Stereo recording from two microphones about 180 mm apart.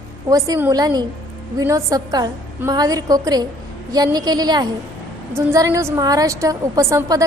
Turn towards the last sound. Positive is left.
turn(degrees=-15)  # may be behind; listen again after turning